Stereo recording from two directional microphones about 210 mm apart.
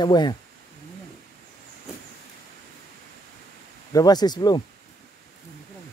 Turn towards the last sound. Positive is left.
turn(degrees=20)  # may be behind; listen again after turning